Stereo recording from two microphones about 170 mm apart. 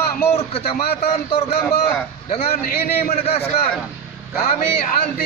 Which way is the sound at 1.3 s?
35° left (ahead or behind).